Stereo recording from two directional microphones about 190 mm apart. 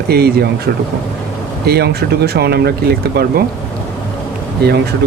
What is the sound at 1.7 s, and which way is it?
Speech, 60° right (ahead or behind).